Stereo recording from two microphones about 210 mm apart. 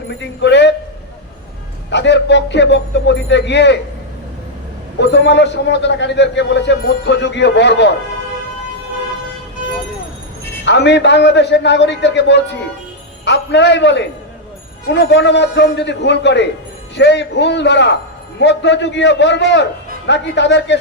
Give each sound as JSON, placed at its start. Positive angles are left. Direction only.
{"t": 0.1, "sound": "a sound", "side_deg": 55}
{"t": 1.9, "sound": "a man's voice", "side_deg": 55}
{"t": 4.9, "sound": "a man's voice", "side_deg": 55}
{"t": 10.7, "sound": "a man's voice", "side_deg": 55}